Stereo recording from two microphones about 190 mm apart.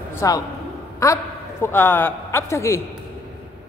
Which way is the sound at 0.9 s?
15° left (ahead or behind).